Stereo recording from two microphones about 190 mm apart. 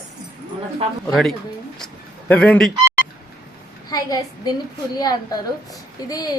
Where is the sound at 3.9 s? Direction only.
20° left (ahead or behind).